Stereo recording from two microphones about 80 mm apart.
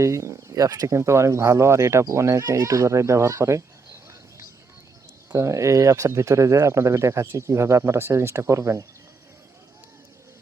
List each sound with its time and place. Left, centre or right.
0.0 s speech: right
0.9 s speech: right
5.3 s speech: right